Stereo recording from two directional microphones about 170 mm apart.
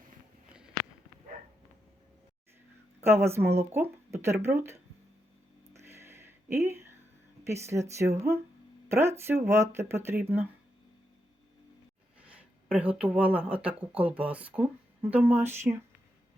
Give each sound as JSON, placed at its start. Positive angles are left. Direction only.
{"t": 3.0, "sound": "speech", "side_deg": -15}
{"t": 5.7, "sound": "a sound", "side_deg": -15}
{"t": 7.4, "sound": "speech", "side_deg": -15}
{"t": 12.2, "sound": "speech", "side_deg": -5}